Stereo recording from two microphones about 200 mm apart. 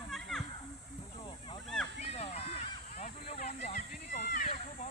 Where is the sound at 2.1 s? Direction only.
30° left (ahead or behind).